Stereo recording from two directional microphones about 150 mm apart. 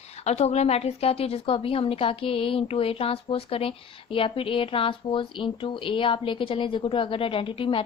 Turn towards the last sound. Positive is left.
turn(degrees=35)  # may be behind; listen again after turning